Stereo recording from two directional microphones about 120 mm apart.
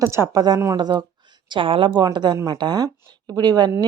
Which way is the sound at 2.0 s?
35° right (ahead or behind).